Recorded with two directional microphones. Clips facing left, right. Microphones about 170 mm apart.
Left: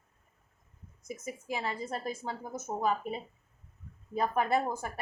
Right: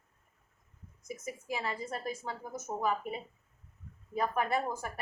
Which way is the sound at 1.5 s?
30° left (ahead or behind).